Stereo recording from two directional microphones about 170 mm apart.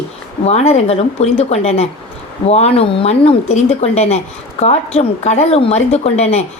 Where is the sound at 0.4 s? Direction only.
40° left (ahead or behind).